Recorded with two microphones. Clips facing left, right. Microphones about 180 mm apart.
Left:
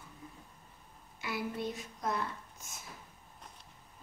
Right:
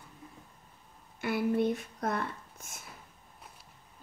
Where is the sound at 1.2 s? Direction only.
55° right (ahead or behind).